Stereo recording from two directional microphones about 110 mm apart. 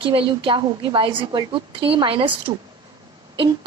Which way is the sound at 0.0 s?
50° right (ahead or behind).